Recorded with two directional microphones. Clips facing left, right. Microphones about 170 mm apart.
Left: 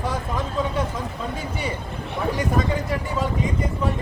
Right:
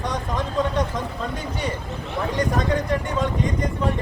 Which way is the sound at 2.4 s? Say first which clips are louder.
Right 3 dB; 5° left (ahead or behind).